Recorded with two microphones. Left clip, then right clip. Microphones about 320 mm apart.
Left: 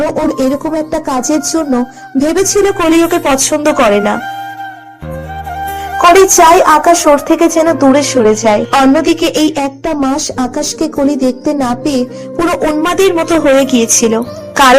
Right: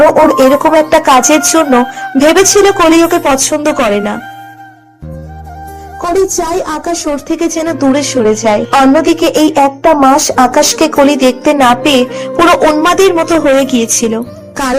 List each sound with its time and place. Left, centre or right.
0.0 s speech: right; by 4.2 s centre
6.0 s a woman's voice: left; by 14.8 s centre